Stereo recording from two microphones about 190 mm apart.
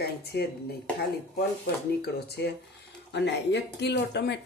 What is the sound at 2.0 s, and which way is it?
A woman's voice, 60° left (ahead or behind).